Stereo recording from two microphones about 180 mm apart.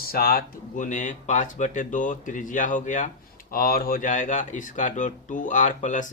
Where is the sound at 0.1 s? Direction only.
55° left (ahead or behind).